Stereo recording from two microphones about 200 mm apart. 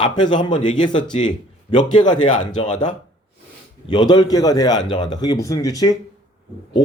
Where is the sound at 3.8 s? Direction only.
20° left (ahead or behind).